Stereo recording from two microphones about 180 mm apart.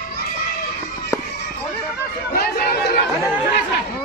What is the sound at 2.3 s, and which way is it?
Chatter, 55° left (ahead or behind).